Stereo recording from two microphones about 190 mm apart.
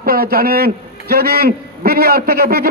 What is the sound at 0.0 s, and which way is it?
A man's voice, 50° right (ahead or behind).